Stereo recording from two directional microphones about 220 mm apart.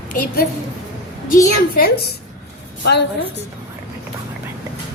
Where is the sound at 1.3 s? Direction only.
40° left (ahead or behind).